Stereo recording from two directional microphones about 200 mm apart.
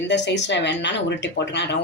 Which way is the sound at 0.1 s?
60° left (ahead or behind).